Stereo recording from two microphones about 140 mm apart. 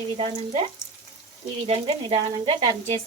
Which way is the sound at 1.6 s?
40° right (ahead or behind).